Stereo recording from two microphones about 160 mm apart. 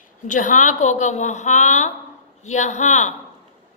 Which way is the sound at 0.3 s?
50° left (ahead or behind).